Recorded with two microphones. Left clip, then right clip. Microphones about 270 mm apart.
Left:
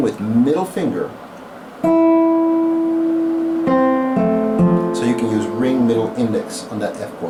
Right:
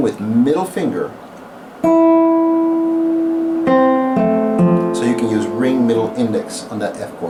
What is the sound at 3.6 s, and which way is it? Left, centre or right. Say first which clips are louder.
Guitar: right 4 dB; centre.